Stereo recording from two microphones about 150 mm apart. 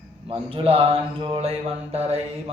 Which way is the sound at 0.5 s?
40° right (ahead or behind).